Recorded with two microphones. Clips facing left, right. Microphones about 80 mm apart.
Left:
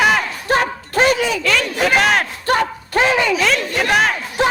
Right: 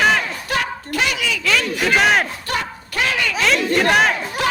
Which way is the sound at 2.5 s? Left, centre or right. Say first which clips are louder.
Left 7 dB; left.